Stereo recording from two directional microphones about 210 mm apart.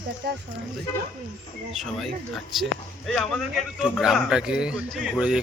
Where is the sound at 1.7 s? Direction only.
Centre (ahead or behind).